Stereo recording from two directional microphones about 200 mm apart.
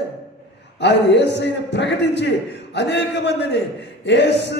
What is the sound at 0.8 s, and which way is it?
A man's voice, 60° left (ahead or behind).